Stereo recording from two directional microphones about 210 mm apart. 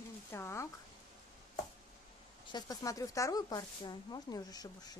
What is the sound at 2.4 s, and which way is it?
Speech, 20° left (ahead or behind).